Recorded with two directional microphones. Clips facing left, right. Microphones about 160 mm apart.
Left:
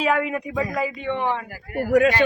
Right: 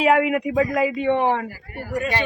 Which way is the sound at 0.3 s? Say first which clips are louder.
Right 6 dB; 75° right (ahead or behind).